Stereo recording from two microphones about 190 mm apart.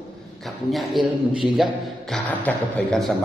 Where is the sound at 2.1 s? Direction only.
5° left (ahead or behind).